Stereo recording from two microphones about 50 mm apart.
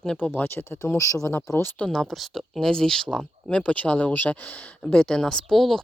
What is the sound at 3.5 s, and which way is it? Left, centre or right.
Speech, left.